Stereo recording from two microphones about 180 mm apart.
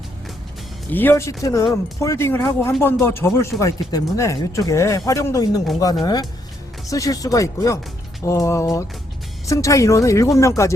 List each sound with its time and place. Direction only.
0.9 s speech: 10° left (ahead or behind)